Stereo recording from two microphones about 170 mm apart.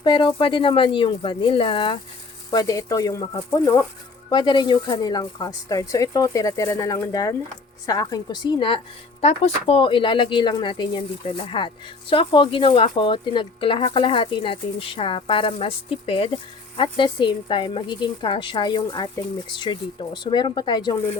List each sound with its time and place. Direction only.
0.0 s speech: 30° left (ahead or behind)